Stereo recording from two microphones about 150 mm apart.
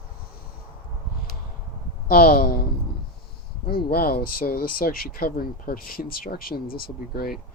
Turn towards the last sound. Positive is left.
turn(degrees=80)